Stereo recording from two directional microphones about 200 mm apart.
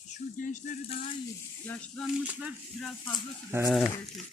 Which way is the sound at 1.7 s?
5° left (ahead or behind).